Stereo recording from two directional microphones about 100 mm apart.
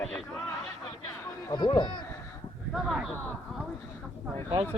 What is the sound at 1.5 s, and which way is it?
Speech, 50° left (ahead or behind).